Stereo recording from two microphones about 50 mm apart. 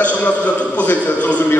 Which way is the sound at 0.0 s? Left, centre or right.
Left.